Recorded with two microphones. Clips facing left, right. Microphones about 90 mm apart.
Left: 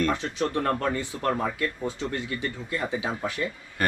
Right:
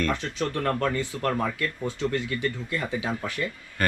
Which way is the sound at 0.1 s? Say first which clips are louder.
Left 1 dB; 15° left (ahead or behind).